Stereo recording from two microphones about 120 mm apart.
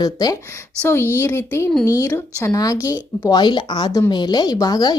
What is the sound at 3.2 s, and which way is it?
Speech, 40° left (ahead or behind).